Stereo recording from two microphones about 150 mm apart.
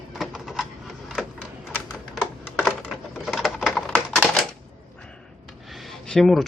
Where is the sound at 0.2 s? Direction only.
Centre (ahead or behind).